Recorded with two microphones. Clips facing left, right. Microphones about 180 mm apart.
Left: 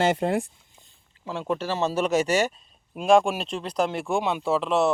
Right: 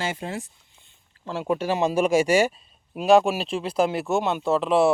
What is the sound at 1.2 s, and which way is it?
Speech, 5° right (ahead or behind).